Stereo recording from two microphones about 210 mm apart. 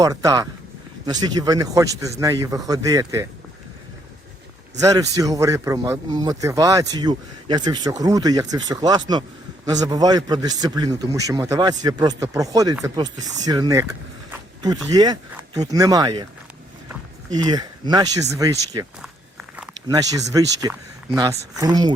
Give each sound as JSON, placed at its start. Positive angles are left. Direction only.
{"t": 0.0, "sound": "speech", "side_deg": -15}
{"t": 4.8, "sound": "speech", "side_deg": -15}
{"t": 14.8, "sound": "speech", "side_deg": -20}